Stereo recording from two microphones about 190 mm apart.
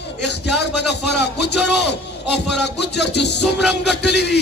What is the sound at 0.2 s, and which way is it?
A man's voice, 65° left (ahead or behind).